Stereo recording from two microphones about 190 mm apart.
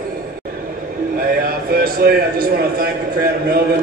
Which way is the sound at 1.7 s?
50° right (ahead or behind).